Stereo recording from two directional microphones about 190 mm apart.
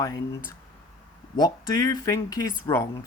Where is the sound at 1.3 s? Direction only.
20° left (ahead or behind).